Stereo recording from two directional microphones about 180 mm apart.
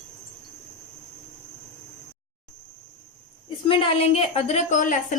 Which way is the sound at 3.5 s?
30° left (ahead or behind).